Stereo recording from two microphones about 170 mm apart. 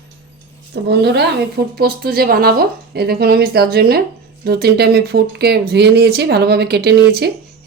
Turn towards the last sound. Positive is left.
turn(degrees=-70)  # may be behind; listen again after turning